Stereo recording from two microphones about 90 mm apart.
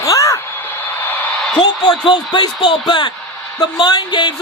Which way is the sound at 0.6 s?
20° left (ahead or behind).